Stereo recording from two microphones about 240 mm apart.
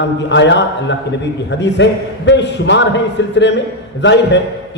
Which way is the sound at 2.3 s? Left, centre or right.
Left.